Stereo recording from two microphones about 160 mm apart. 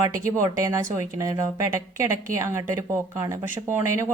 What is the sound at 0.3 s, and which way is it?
A woman's voice, 20° right (ahead or behind).